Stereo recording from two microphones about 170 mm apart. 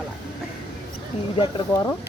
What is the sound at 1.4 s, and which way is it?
Speech, 25° left (ahead or behind).